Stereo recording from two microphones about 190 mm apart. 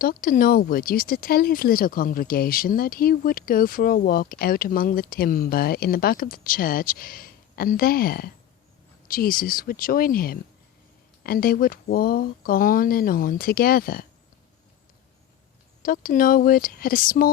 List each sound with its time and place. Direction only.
0.0 s speech: 50° left (ahead or behind)
15.8 s speech: 50° left (ahead or behind)